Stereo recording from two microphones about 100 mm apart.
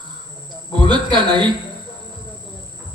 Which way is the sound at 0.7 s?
50° right (ahead or behind).